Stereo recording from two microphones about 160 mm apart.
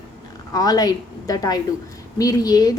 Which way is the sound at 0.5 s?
25° left (ahead or behind).